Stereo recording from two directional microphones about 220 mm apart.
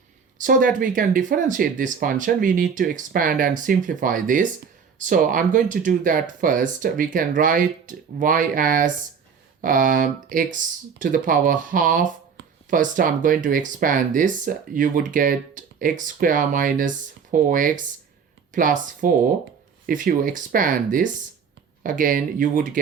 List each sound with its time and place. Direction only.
0.3 s speech: 35° right (ahead or behind)